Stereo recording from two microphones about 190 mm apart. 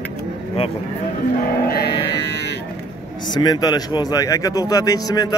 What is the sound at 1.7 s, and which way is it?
Music, 55° left (ahead or behind).